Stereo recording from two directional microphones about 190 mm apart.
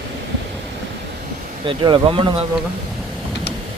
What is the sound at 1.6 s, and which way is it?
Speech, 25° right (ahead or behind).